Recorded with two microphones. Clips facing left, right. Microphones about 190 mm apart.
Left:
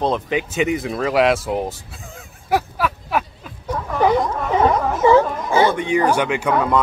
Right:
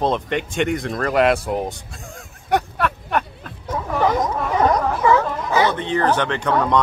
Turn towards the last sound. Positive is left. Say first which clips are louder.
# left 1 dB
turn(degrees=5)  # may be behind; listen again after turning